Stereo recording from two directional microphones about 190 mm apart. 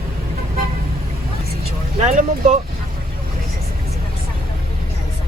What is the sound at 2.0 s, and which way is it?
Speech, 40° right (ahead or behind).